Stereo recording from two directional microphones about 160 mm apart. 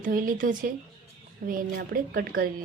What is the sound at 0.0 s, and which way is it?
A woman's voice, 60° right (ahead or behind).